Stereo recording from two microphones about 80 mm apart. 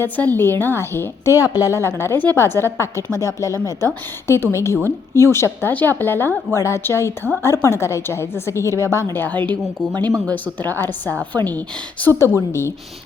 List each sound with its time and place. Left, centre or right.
0.0 s a woman's voice: left
1.4 s a woman's voice: left
1.8 s a woman's voice: left
9.1 s a woman's voice: left
10.1 s speech: right
10.3 s a woman's voice: left
12.2 s a woman's voice: left